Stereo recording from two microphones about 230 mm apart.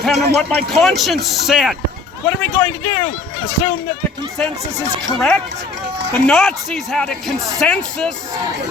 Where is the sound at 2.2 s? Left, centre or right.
Centre.